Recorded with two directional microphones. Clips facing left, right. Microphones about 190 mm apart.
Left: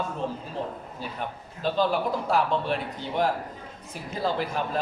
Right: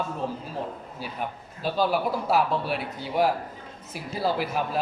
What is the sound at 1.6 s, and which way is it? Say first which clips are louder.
A man's voice: even; 10° right (ahead or behind).